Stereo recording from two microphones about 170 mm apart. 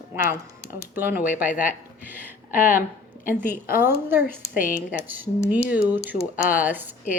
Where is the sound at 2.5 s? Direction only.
55° left (ahead or behind).